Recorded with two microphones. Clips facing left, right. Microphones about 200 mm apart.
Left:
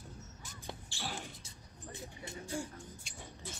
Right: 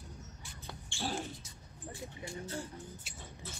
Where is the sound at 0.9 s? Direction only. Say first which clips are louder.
Right 7 dB; 30° right (ahead or behind).